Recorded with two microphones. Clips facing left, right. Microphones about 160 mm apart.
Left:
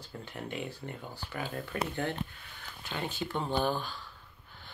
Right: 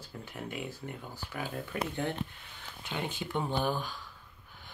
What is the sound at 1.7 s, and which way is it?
Speech, 15° right (ahead or behind).